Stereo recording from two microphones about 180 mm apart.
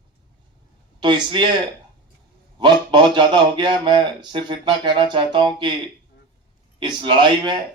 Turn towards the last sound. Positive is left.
turn(degrees=-25)  # may be behind; listen again after turning